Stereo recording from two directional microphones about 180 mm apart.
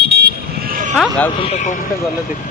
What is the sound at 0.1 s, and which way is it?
Vehicle, 65° right (ahead or behind).